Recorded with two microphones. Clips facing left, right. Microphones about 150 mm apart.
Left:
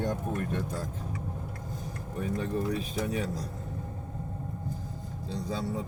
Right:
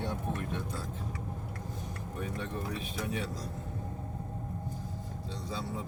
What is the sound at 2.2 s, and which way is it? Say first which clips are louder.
Speech: left 7 dB; 35° left (ahead or behind).